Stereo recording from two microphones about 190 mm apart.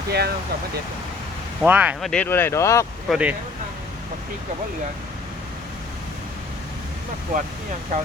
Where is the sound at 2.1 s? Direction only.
10° left (ahead or behind).